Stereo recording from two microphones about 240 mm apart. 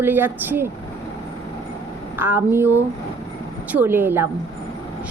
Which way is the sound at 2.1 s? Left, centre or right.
Centre.